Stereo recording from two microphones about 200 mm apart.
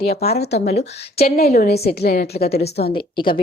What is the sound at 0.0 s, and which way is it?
Speech, 30° left (ahead or behind).